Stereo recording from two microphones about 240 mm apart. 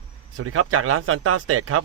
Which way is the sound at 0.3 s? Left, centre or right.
Right.